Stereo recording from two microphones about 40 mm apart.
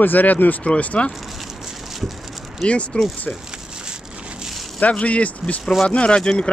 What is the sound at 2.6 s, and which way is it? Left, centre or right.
Speech, left.